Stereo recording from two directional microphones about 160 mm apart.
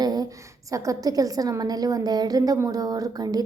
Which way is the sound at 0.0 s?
25° right (ahead or behind).